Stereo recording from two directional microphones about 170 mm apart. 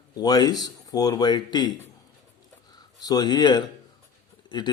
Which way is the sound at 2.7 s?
25° left (ahead or behind).